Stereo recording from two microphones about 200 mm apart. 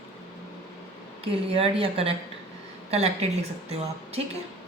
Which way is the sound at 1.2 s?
30° right (ahead or behind).